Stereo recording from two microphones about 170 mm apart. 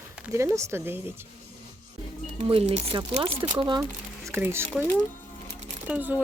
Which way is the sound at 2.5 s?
35° right (ahead or behind).